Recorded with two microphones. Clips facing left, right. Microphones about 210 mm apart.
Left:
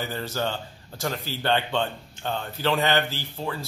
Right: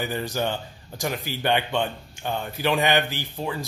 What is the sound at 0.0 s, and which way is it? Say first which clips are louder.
Speech: right 2 dB; 15° right (ahead or behind).